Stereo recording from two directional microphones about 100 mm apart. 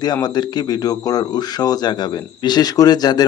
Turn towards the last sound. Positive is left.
turn(degrees=40)  # may be behind; listen again after turning